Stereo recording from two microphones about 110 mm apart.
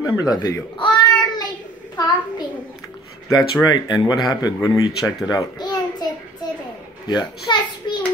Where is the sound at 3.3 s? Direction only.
40° left (ahead or behind).